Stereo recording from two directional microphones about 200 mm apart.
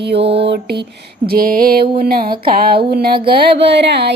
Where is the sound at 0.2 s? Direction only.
30° right (ahead or behind).